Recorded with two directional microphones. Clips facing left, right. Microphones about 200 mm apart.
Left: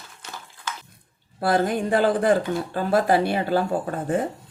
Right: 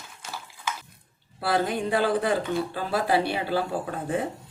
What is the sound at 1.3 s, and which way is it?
Speech, 45° left (ahead or behind).